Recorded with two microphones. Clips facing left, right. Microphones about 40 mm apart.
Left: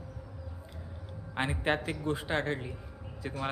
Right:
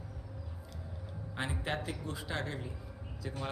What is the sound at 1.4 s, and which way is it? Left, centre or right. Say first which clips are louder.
A man's voice: left 6 dB; left.